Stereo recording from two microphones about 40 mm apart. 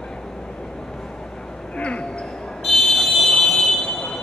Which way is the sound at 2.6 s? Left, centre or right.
Centre.